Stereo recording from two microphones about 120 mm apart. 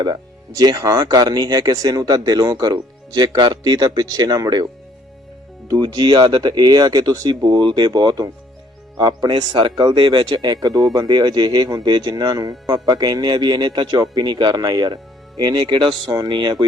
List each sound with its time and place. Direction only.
0.0 s speech: 35° right (ahead or behind)